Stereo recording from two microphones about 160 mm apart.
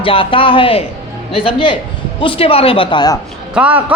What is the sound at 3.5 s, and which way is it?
Speech, 10° right (ahead or behind).